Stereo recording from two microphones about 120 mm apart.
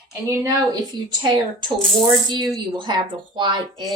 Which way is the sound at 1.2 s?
35° right (ahead or behind).